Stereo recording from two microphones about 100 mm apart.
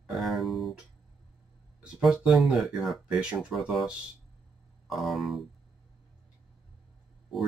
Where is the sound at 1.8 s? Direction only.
5° right (ahead or behind).